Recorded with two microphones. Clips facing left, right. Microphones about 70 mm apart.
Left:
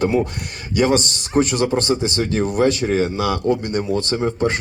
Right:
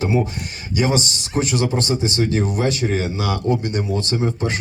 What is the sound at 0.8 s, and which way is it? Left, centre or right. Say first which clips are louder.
A man's voice: left 3 dB; left.